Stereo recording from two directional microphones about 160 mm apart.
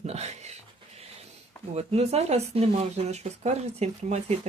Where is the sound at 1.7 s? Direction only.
40° right (ahead or behind).